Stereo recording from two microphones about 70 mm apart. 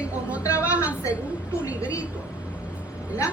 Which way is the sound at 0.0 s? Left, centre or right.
Centre.